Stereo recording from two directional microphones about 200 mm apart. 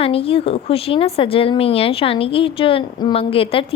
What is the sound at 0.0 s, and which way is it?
A woman's voice, 30° left (ahead or behind).